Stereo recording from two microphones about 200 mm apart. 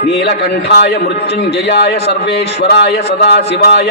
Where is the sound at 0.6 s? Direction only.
55° left (ahead or behind).